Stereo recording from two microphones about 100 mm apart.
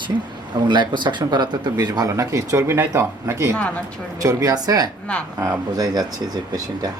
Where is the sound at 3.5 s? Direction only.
15° left (ahead or behind).